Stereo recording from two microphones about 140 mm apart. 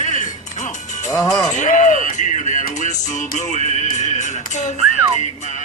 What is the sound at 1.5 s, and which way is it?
Music, 60° left (ahead or behind).